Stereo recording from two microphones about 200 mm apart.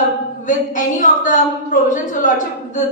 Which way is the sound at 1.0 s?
40° left (ahead or behind).